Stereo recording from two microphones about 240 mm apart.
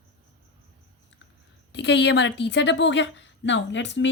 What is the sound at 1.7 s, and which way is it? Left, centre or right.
A woman's voice, left.